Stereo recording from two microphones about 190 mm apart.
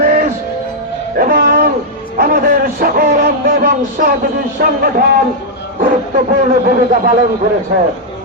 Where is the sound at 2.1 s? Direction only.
50° right (ahead or behind).